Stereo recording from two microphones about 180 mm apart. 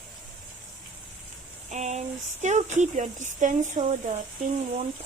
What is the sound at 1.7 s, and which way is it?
Speech, 40° right (ahead or behind).